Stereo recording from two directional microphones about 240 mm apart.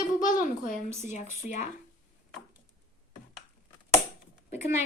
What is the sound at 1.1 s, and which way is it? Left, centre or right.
Speech, left.